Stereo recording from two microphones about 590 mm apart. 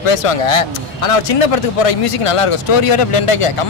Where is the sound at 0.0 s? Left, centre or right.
Left.